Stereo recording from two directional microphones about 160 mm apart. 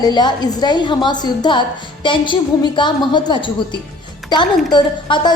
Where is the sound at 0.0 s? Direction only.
25° left (ahead or behind).